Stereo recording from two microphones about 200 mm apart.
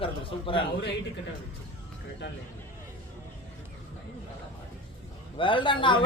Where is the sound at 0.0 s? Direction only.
25° left (ahead or behind).